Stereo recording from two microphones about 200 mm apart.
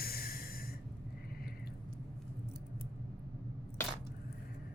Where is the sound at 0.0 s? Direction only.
50° left (ahead or behind).